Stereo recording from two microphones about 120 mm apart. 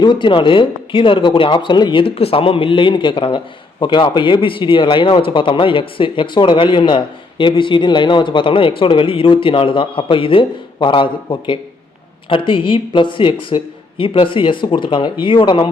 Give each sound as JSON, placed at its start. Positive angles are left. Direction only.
{"t": 0.0, "sound": "speech", "side_deg": 40}